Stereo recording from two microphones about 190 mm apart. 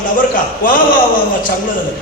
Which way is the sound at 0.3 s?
45° left (ahead or behind).